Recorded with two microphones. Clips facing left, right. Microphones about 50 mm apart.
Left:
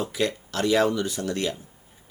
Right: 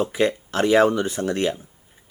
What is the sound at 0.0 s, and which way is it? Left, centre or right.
Speech, right.